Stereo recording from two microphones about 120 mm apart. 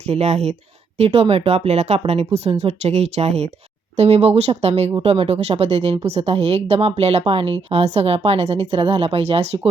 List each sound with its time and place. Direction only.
0.0 s a woman's voice: 65° right (ahead or behind)